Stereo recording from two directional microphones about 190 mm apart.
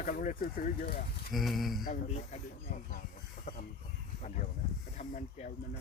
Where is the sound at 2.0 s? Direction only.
35° left (ahead or behind).